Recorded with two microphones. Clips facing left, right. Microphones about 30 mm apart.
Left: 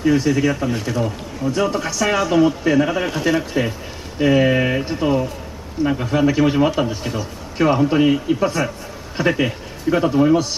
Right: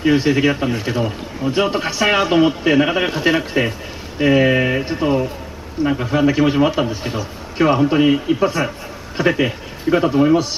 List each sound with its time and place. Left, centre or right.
0.0 s a man's voice: right
4.2 s a man's voice: centre